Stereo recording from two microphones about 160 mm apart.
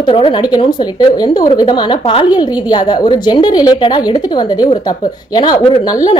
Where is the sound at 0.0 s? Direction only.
30° left (ahead or behind).